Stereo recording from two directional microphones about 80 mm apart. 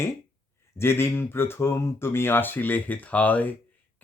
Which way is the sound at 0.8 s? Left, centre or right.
Left.